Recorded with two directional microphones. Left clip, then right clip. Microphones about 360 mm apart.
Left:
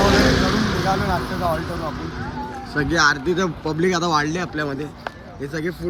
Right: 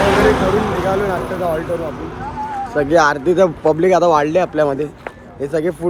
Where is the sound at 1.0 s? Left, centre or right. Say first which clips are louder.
Right 3 dB; centre.